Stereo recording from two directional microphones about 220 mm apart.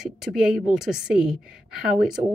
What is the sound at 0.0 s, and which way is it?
A woman's voice, centre (ahead or behind).